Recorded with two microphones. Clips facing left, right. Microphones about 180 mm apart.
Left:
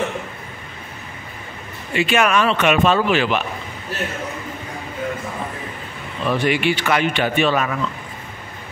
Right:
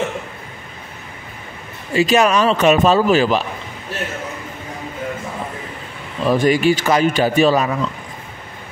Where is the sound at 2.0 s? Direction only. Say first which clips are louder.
Right 3 dB; 40° right (ahead or behind).